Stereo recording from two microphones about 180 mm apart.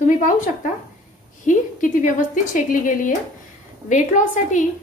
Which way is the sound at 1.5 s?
45° left (ahead or behind).